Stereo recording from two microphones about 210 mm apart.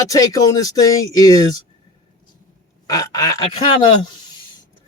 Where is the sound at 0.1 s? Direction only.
15° left (ahead or behind).